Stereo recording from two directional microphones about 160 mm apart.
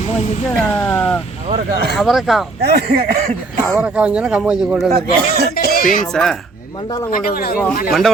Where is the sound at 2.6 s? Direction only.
65° right (ahead or behind).